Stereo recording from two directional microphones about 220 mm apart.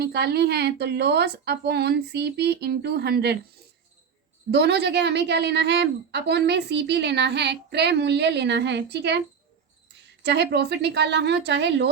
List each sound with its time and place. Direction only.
0.0 s a woman's voice: 45° right (ahead or behind)
4.5 s a woman's voice: 50° right (ahead or behind)
10.2 s a woman's voice: 50° right (ahead or behind)